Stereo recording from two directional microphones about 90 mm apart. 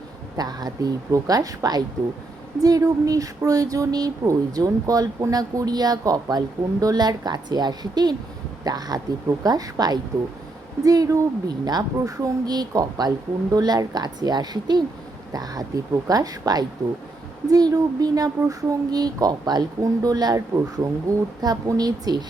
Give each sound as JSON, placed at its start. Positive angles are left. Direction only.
{"t": 0.3, "sound": "speech", "side_deg": -45}